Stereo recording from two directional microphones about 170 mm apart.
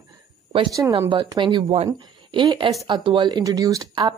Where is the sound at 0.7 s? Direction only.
20° right (ahead or behind).